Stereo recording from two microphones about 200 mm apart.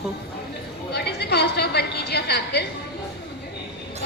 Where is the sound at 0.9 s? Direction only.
55° left (ahead or behind).